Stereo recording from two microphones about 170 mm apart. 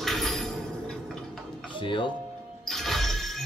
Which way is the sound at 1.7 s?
30° left (ahead or behind).